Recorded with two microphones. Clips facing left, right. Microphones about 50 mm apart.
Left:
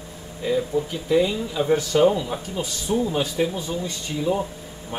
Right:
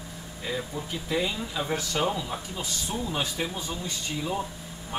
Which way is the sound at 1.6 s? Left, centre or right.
Centre.